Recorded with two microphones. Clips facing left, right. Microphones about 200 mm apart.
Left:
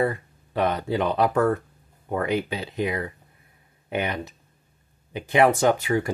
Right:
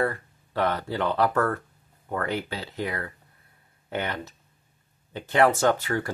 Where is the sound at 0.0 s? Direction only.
15° left (ahead or behind).